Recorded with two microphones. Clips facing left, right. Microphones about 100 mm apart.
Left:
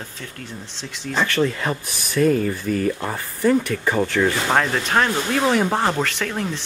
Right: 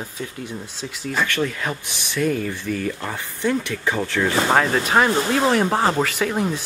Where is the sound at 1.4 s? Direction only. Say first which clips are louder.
Left 3 dB; 20° left (ahead or behind).